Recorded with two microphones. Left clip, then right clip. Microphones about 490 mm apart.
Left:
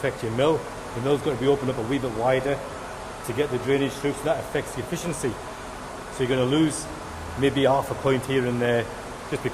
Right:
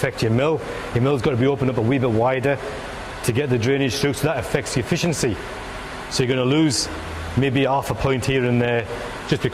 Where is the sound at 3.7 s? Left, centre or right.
Right.